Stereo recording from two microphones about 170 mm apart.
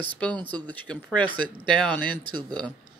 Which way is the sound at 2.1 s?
25° right (ahead or behind).